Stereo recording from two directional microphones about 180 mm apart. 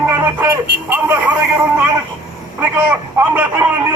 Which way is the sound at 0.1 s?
10° right (ahead or behind).